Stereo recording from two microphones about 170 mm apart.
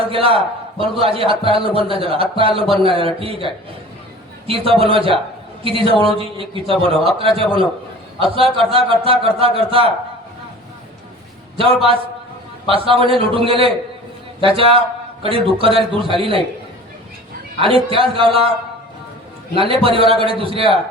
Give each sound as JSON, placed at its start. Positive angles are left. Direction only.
{"t": 0.1, "sound": "a man's voice", "side_deg": -30}
{"t": 11.5, "sound": "a man's voice", "side_deg": -30}
{"t": 17.6, "sound": "a man's voice", "side_deg": -30}
{"t": 19.5, "sound": "a man's voice", "side_deg": -35}